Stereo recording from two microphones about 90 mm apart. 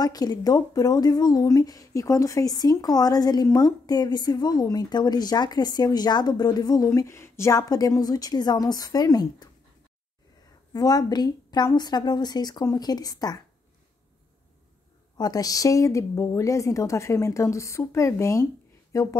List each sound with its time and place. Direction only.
0.0 s speech: 45° left (ahead or behind)
6.9 s speech: 30° left (ahead or behind)
7.5 s speech: 45° left (ahead or behind)
10.7 s speech: 45° left (ahead or behind)
15.1 s speech: 45° left (ahead or behind)